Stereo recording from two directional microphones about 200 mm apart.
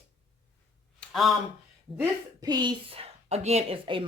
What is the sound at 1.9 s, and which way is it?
A woman's voice, 20° right (ahead or behind).